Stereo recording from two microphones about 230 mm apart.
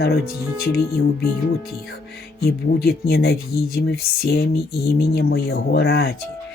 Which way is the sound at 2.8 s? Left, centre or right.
Left.